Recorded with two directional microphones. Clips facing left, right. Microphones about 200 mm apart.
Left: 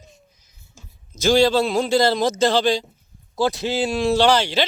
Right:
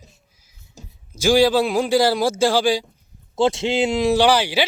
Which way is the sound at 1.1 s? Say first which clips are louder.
Right 1 dB; 10° right (ahead or behind).